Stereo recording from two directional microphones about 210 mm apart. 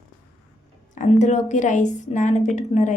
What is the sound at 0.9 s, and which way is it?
A woman's voice, 35° left (ahead or behind).